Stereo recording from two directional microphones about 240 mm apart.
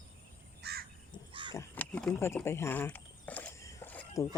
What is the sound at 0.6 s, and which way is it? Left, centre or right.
Crow, right.